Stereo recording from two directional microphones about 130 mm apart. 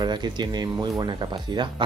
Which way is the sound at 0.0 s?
35° right (ahead or behind).